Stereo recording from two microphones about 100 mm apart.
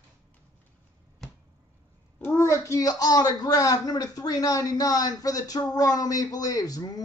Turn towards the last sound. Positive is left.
turn(degrees=40)  # may be behind; listen again after turning